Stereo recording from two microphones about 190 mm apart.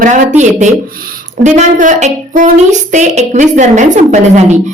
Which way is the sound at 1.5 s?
40° right (ahead or behind).